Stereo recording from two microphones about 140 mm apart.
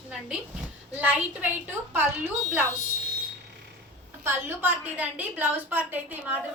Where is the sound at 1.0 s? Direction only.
10° right (ahead or behind).